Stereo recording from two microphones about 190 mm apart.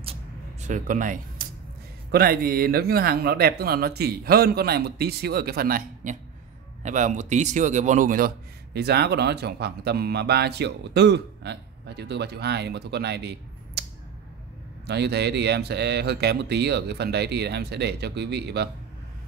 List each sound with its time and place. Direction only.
0.0 s a sound: 35° right (ahead or behind)
2.0 s speech: 55° right (ahead or behind)
8.7 s speech: 60° right (ahead or behind)
14.9 s speech: 60° right (ahead or behind)